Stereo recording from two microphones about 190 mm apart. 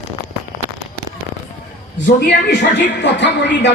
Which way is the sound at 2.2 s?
70° left (ahead or behind).